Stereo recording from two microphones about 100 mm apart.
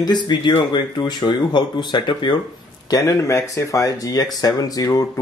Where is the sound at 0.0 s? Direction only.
45° left (ahead or behind).